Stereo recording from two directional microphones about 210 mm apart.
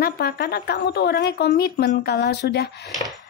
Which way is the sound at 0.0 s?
45° left (ahead or behind).